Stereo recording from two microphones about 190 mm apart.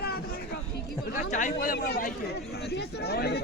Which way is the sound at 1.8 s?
55° left (ahead or behind).